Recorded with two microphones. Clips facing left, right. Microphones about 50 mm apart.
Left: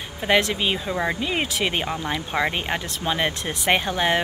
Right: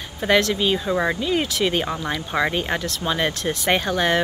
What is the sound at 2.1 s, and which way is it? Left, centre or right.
Speech, centre.